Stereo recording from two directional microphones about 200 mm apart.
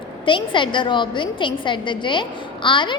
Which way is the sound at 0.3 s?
25° left (ahead or behind).